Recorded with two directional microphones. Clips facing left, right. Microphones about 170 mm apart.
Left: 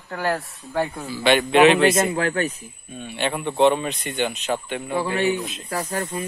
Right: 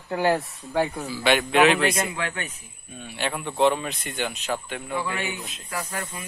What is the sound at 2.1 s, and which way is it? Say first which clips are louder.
Speech: left 8 dB; 40° left (ahead or behind).